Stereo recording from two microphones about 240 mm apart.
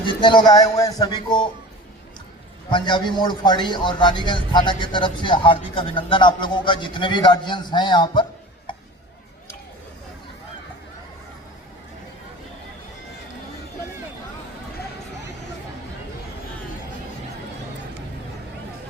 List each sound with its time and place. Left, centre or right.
0.0 s speech: centre
2.6 s speech: centre